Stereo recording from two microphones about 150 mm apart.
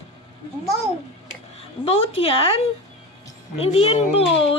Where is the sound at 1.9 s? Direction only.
40° left (ahead or behind).